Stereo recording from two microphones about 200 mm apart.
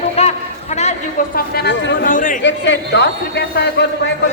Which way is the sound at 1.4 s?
55° left (ahead or behind).